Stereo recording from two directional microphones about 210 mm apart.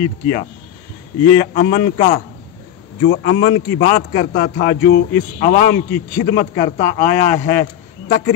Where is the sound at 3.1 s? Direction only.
65° left (ahead or behind).